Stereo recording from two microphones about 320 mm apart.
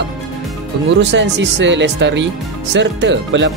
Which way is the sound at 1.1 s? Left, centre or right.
Right.